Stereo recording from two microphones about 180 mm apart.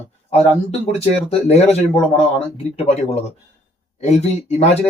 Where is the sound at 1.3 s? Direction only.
35° left (ahead or behind).